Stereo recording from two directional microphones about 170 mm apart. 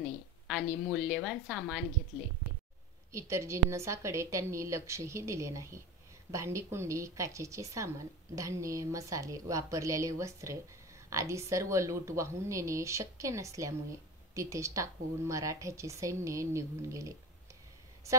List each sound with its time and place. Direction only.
0.5 s a woman's voice: centre (ahead or behind)
3.1 s a woman's voice: 15° right (ahead or behind)